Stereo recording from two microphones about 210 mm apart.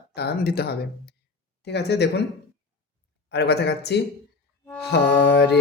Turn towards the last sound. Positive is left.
turn(degrees=50)  # may be behind; listen again after turning